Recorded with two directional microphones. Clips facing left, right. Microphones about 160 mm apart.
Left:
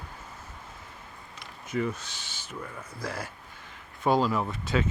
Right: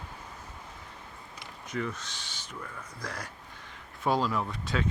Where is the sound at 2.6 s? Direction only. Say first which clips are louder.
Left 3 dB; 30° left (ahead or behind).